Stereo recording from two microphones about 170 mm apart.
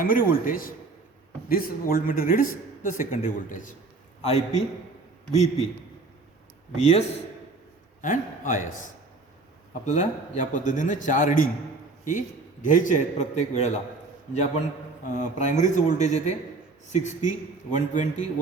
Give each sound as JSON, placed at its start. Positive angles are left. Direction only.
{"t": 0.0, "sound": "speech", "side_deg": 55}
{"t": 4.2, "sound": "a man's voice", "side_deg": 40}
{"t": 6.7, "sound": "a man's voice", "side_deg": 40}
{"t": 8.0, "sound": "a man's voice", "side_deg": 50}
{"t": 12.6, "sound": "a man's voice", "side_deg": 50}
{"t": 15.0, "sound": "a man's voice", "side_deg": 45}